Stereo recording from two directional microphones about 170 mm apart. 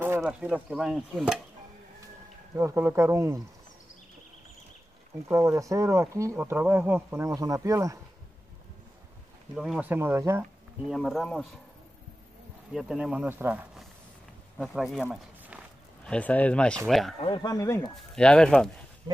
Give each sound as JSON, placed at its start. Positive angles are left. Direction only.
{"t": 0.2, "sound": "speech", "side_deg": -5}
{"t": 2.5, "sound": "speech", "side_deg": -15}
{"t": 5.3, "sound": "speech", "side_deg": -15}
{"t": 9.6, "sound": "speech", "side_deg": -5}
{"t": 10.9, "sound": "speech", "side_deg": 0}
{"t": 12.7, "sound": "speech", "side_deg": -5}
{"t": 15.0, "sound": "a sound", "side_deg": -10}
{"t": 16.0, "sound": "speech", "side_deg": 5}
{"t": 17.2, "sound": "speech", "side_deg": 25}
{"t": 17.9, "sound": "speech", "side_deg": 5}